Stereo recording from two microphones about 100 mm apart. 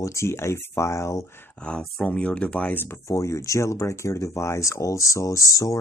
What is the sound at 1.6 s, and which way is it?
Speech, 10° left (ahead or behind).